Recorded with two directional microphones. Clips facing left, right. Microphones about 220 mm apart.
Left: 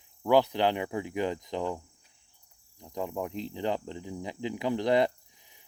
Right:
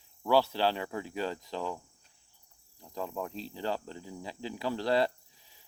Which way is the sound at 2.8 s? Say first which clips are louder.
Left 3 dB; 20° left (ahead or behind).